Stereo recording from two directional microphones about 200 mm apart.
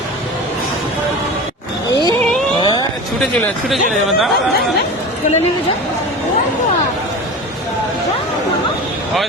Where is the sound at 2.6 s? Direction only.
20° left (ahead or behind).